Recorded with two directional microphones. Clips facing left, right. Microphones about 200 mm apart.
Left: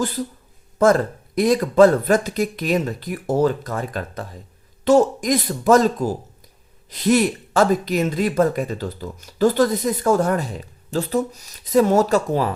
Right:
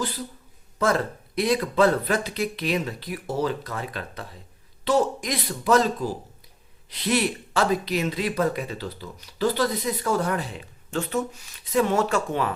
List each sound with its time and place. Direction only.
0.8 s speech: 45° left (ahead or behind)